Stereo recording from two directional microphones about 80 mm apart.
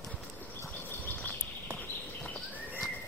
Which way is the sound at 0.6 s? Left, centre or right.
Left.